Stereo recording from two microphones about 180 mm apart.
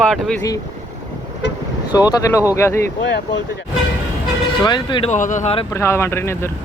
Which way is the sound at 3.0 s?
80° left.